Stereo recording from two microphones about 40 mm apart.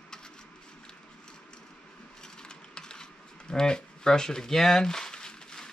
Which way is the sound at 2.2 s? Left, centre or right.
Centre.